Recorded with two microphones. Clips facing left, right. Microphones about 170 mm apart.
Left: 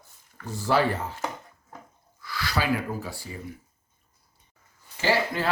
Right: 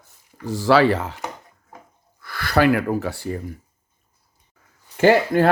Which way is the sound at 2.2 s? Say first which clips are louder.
Right 10 dB; 55° right (ahead or behind).